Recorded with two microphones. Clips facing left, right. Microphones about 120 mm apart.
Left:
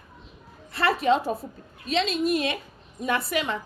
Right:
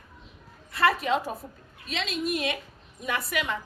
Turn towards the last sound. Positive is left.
turn(degrees=30)  # may be behind; listen again after turning